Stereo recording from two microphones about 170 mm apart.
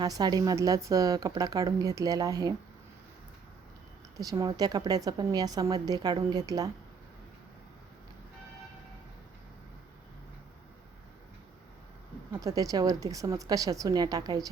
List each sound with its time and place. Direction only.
0.0 s speech: 25° right (ahead or behind)
4.2 s speech: 20° right (ahead or behind)
12.3 s speech: 20° right (ahead or behind)